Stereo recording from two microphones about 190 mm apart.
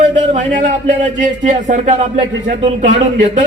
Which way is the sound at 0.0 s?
40° right (ahead or behind).